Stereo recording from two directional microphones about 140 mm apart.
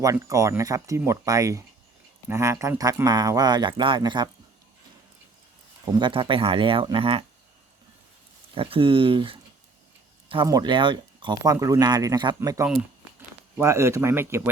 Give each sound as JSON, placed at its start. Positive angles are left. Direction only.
{"t": 0.0, "sound": "speech", "side_deg": -20}
{"t": 5.8, "sound": "speech", "side_deg": -30}
{"t": 8.5, "sound": "speech", "side_deg": -40}
{"t": 10.4, "sound": "speech", "side_deg": -30}